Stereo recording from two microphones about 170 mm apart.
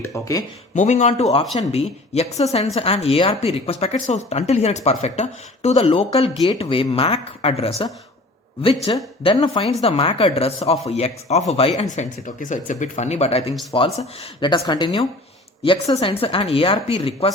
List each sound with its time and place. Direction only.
0.1 s a woman's voice: 20° left (ahead or behind)
0.7 s speech: 45° left (ahead or behind)
8.9 s a woman's voice: 30° left (ahead or behind)